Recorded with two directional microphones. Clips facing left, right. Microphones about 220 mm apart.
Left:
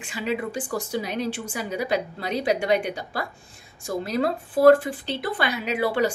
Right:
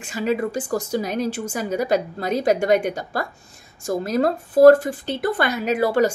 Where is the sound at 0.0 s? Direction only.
45° right (ahead or behind).